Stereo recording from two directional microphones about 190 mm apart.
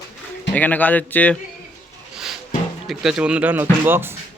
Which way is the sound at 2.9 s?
5° right (ahead or behind).